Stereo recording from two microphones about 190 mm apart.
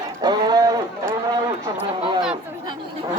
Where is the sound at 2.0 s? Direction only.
25° right (ahead or behind).